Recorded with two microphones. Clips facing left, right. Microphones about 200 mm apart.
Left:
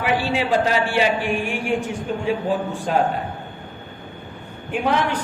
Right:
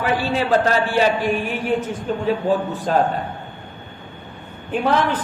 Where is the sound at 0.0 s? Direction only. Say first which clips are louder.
Right 1 dB; 15° left (ahead or behind).